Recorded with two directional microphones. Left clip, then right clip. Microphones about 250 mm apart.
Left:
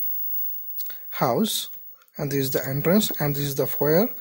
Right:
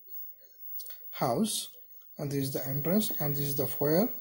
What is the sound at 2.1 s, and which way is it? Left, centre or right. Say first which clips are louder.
Speech: left 9 dB; left.